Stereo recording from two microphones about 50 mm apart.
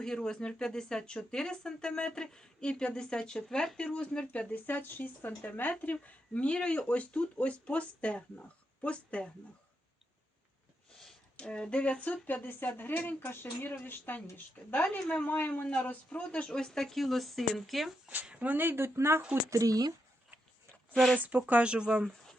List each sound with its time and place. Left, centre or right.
0.0 s speech: centre
11.3 s speech: centre
16.5 s speech: centre
18.3 s speech: right
18.9 s speech: right
21.2 s speech: right
21.6 s speech: right